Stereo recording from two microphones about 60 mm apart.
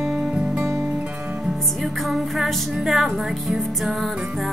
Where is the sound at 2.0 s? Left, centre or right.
Centre.